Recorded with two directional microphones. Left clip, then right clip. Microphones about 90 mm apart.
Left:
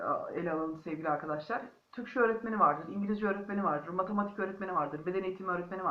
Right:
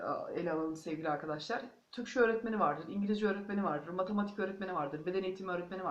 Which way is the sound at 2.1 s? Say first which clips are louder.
Left 2 dB; 35° right (ahead or behind).